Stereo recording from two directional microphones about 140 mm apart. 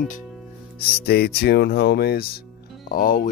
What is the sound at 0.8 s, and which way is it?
Speech, 90° left.